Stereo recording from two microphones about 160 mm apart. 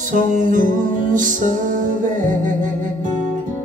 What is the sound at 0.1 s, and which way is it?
Music, 55° right (ahead or behind).